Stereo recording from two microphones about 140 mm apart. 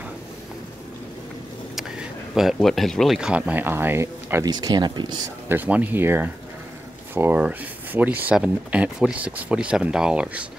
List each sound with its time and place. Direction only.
2.3 s speech: centre (ahead or behind); by 4.5 s 20° right (ahead or behind)
4.5 s speech: 30° right (ahead or behind)
5.5 s speech: 10° right (ahead or behind)